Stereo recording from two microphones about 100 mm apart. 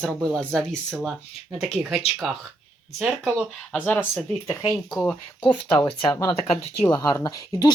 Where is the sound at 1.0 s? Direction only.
5° right (ahead or behind).